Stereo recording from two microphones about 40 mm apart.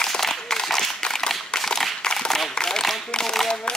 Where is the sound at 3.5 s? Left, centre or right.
Left.